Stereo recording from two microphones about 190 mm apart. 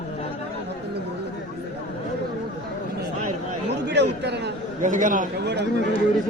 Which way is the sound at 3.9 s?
65° right (ahead or behind).